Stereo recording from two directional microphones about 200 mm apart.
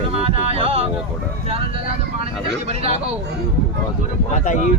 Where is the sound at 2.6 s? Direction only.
30° right (ahead or behind).